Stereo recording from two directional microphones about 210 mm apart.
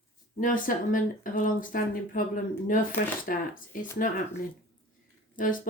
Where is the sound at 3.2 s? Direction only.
40° left (ahead or behind).